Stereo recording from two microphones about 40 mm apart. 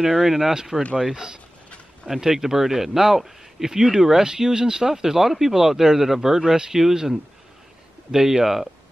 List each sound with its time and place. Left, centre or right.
0.0 s speech: centre